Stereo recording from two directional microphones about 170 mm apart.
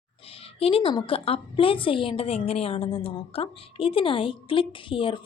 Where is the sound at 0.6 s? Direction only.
35° left (ahead or behind).